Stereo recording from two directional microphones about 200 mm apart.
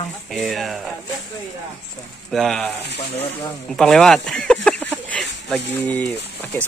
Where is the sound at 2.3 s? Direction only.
Centre (ahead or behind).